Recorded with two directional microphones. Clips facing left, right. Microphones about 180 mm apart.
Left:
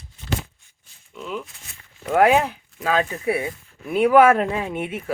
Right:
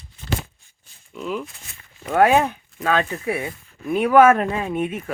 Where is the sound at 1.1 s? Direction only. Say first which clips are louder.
Right 3 dB; 5° right (ahead or behind).